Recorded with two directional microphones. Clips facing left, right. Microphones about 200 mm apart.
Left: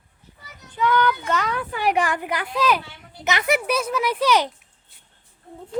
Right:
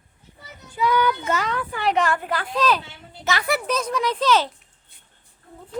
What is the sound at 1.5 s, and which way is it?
Speech, 10° left (ahead or behind).